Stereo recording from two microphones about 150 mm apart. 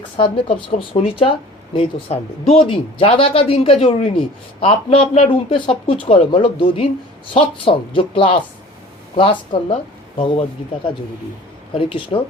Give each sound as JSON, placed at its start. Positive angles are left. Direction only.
{"t": 0.2, "sound": "speech", "side_deg": 40}
{"t": 11.7, "sound": "speech", "side_deg": 35}